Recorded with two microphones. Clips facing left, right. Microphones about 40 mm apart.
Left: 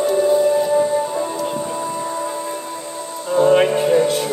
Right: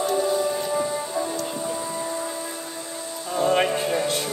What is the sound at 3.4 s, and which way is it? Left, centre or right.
Music, centre.